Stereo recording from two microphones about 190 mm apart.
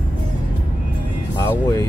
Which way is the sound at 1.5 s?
15° left (ahead or behind).